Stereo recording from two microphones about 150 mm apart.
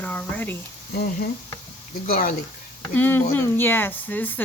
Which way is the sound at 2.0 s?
80° left.